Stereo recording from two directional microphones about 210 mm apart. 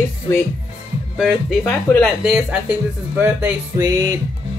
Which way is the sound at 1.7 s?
10° left (ahead or behind).